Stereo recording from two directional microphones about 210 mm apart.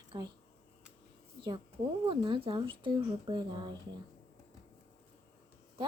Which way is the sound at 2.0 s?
25° right (ahead or behind).